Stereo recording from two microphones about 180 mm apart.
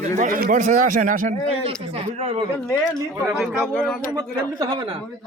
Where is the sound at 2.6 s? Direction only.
5° left (ahead or behind).